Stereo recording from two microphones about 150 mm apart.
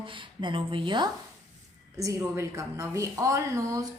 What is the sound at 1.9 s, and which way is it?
A woman's voice, 20° right (ahead or behind).